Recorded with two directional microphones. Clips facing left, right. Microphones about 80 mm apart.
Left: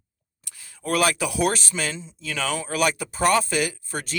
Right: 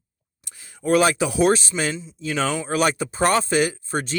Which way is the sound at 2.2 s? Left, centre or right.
Right.